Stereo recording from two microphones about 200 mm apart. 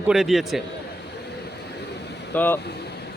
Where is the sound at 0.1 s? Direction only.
Centre (ahead or behind).